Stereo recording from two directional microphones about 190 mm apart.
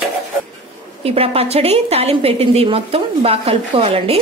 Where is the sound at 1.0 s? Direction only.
30° right (ahead or behind).